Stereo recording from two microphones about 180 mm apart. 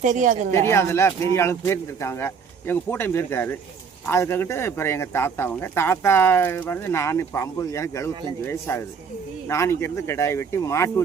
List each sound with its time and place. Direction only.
0.0 s a woman's voice: 45° right (ahead or behind)
0.5 s speech: 15° left (ahead or behind)